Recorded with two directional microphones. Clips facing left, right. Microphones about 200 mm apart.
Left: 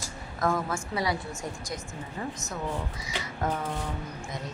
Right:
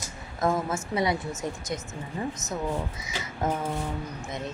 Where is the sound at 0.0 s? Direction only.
20° right (ahead or behind).